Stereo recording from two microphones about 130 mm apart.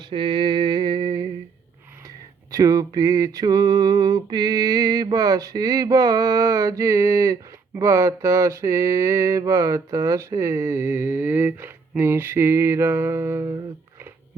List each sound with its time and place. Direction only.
0.0 s mantra: 40° right (ahead or behind); by 13.6 s 25° right (ahead or behind)